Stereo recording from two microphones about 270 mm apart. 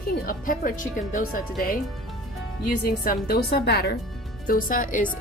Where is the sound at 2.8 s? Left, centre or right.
Left.